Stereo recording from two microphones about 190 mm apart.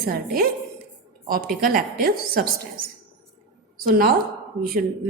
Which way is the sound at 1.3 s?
50° right (ahead or behind).